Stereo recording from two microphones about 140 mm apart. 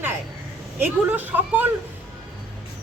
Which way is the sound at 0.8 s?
15° right (ahead or behind).